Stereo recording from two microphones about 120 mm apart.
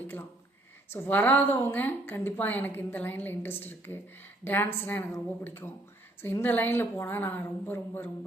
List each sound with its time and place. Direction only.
0.9 s a woman's voice: 15° left (ahead or behind)